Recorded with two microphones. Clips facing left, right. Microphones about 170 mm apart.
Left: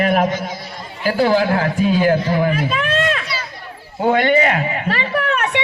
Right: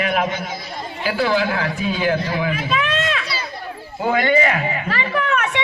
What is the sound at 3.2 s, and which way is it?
Run, 35° right (ahead or behind).